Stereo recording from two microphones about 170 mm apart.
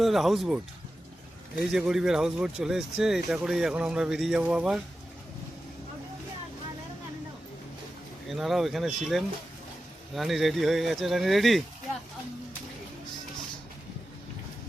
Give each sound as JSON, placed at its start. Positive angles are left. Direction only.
{"t": 0.0, "sound": "speech", "side_deg": 0}
{"t": 8.3, "sound": "speech", "side_deg": 0}